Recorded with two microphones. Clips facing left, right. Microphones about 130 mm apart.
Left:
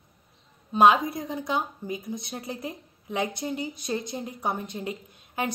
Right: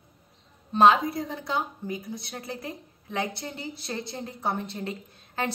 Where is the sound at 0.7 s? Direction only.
15° left (ahead or behind).